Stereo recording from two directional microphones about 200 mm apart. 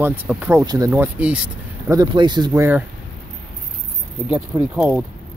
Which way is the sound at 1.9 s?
20° right (ahead or behind).